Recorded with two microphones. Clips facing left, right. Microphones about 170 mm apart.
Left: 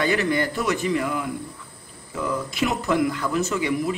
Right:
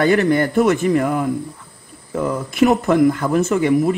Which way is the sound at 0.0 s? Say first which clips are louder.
Right 7 dB; 50° right (ahead or behind).